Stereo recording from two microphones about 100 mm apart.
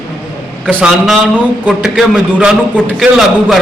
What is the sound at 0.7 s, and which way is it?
A man's voice, 10° right (ahead or behind).